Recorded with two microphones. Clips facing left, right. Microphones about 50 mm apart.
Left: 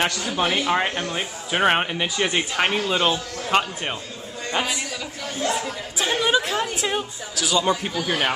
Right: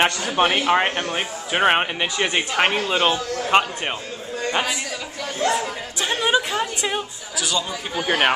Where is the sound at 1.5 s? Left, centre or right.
Centre.